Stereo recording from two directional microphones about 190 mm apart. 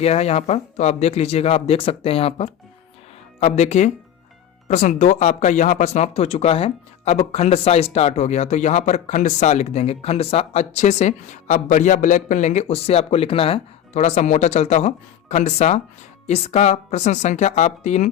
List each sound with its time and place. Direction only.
0.0 s speech: 35° left (ahead or behind)